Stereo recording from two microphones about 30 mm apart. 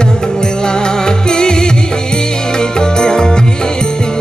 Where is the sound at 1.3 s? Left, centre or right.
Left.